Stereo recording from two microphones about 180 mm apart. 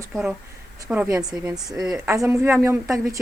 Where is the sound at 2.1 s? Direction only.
15° right (ahead or behind).